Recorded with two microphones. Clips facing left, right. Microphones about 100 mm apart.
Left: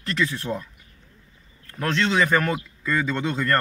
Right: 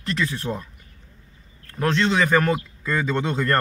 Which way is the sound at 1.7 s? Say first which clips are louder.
Right 1 dB; 20° right (ahead or behind).